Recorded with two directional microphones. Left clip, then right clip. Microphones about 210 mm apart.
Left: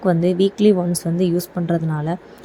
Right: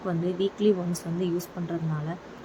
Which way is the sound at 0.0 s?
30° left (ahead or behind).